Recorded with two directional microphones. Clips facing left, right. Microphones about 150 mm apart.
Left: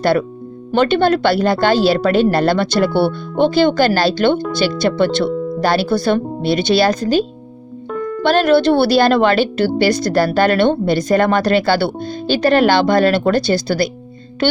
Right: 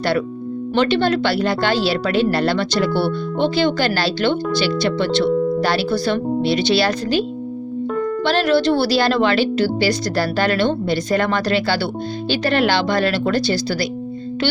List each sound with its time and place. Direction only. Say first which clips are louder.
0.0 s speech: left 4 dB; 45° left (ahead or behind)